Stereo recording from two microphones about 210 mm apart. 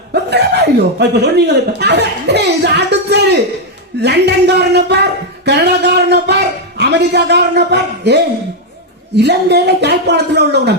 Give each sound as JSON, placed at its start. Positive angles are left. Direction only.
{"t": 0.1, "sound": "a woman's voice", "side_deg": -50}
{"t": 5.5, "sound": "a sound", "side_deg": -55}
{"t": 9.1, "sound": "a woman's voice", "side_deg": -55}